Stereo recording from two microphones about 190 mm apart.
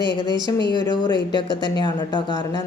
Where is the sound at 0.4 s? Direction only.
25° left (ahead or behind).